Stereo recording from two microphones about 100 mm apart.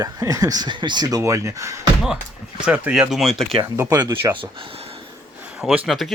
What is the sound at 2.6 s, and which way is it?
Speech, 10° right (ahead or behind).